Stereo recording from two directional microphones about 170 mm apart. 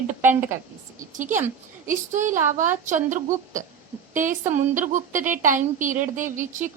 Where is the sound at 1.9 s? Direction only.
50° right (ahead or behind).